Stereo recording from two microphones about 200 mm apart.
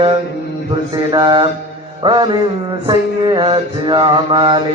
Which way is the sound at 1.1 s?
20° right (ahead or behind).